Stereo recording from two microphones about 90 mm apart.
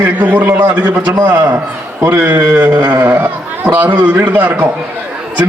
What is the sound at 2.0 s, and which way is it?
A man's voice, 20° right (ahead or behind).